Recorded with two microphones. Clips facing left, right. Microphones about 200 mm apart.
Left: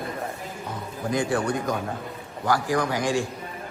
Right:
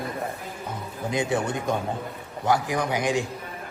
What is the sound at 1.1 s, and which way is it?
Speech, 20° right (ahead or behind).